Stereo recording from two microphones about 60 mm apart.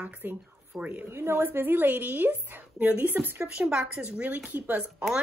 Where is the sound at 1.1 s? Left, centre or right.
Right.